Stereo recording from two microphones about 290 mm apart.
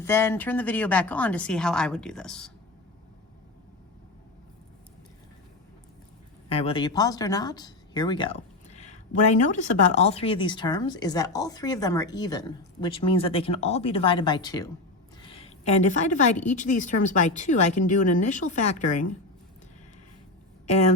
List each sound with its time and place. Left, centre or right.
0.0 s speech: centre
6.5 s a woman's voice: centre
20.7 s speech: left